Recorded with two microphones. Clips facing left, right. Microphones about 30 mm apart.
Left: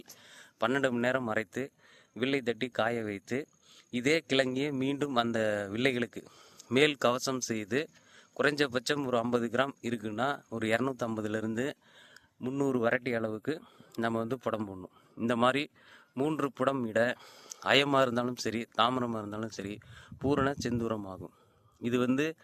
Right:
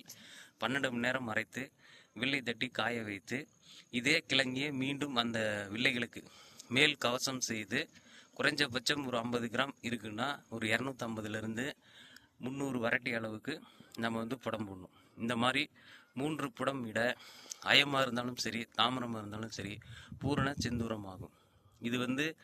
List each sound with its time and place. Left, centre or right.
0.3 s a man's voice: centre
2.1 s speech: centre
10.1 s speech: centre
12.4 s speech: right
12.7 s speech: centre
13.3 s speech: right
14.0 s speech: centre
15.2 s speech: centre
16.6 s a man's voice: centre
17.9 s speech: centre
18.8 s a man's voice: centre
19.5 s speech: right
20.8 s speech: centre
21.8 s speech: right